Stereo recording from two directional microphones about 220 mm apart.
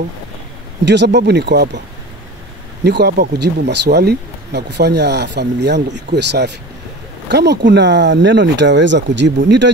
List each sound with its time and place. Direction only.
0.8 s speech: 50° right (ahead or behind)
2.8 s speech: 50° right (ahead or behind)